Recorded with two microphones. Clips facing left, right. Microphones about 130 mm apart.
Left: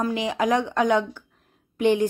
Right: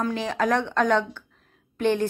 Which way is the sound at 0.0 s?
15° left (ahead or behind).